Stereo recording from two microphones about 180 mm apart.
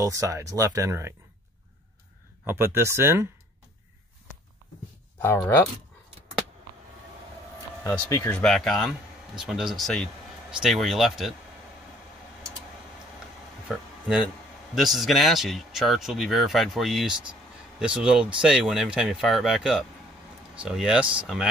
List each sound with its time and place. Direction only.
0.0 s speech: 15° right (ahead or behind)
2.4 s speech: 15° right (ahead or behind)
5.2 s speech: 15° left (ahead or behind)
8.1 s speech: 10° left (ahead or behind)
13.7 s a sound: 5° right (ahead or behind)
14.8 s speech: centre (ahead or behind)